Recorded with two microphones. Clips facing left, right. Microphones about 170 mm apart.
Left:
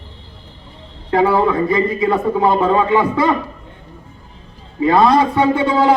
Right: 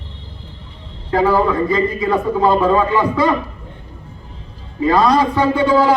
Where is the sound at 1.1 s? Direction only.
25° left (ahead or behind).